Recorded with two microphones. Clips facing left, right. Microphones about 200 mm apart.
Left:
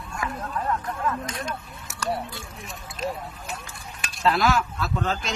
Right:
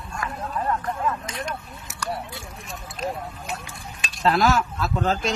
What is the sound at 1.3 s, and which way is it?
Speech, 25° right (ahead or behind).